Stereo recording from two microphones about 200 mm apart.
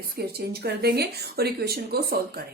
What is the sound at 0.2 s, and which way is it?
Speech, 50° right (ahead or behind).